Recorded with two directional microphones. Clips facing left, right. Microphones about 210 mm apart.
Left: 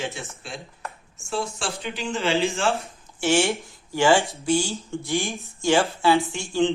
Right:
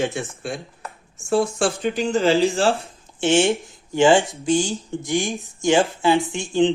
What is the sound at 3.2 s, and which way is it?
Speech, 20° right (ahead or behind).